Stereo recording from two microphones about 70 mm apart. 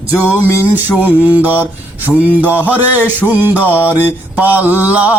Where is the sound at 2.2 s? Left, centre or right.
Right.